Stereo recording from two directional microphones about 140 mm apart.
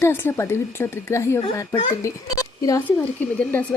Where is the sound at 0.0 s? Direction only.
15° left (ahead or behind).